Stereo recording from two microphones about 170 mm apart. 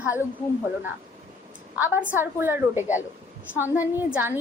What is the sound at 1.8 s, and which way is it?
A woman's voice, 10° right (ahead or behind).